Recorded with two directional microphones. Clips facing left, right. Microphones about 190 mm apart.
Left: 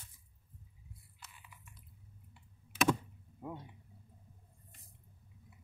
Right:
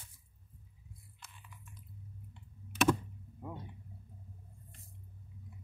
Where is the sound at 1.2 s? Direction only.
5° left (ahead or behind).